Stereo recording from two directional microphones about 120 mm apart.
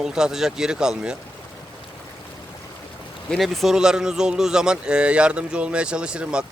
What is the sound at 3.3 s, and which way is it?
Speech, centre (ahead or behind).